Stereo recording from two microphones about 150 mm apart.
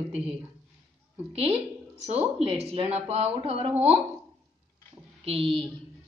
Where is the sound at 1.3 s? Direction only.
40° right (ahead or behind).